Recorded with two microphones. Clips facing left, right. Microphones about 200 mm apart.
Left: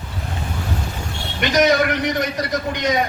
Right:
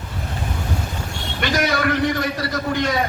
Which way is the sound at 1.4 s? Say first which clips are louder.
Left 4 dB; 20° left (ahead or behind).